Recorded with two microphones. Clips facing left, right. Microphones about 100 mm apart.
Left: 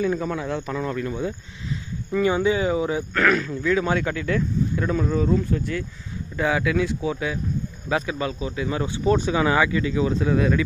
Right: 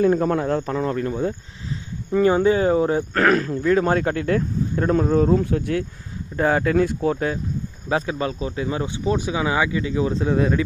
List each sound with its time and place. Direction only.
0.0 s a man's voice: 45° right (ahead or behind)
2.1 s speech: 40° right (ahead or behind); by 5.9 s 60° right (ahead or behind)
6.3 s speech: 40° right (ahead or behind)
7.9 s a man's voice: 30° right (ahead or behind)